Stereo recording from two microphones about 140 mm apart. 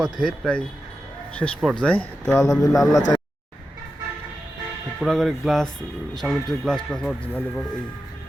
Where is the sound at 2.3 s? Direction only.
25° left (ahead or behind).